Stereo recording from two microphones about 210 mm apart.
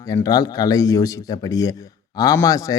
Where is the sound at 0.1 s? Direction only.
15° left (ahead or behind).